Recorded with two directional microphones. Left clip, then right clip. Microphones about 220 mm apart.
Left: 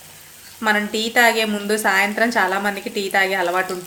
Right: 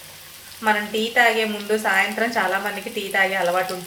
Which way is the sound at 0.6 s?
55° left (ahead or behind).